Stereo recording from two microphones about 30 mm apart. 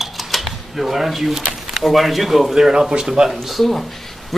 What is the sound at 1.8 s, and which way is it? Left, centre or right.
Speech, centre.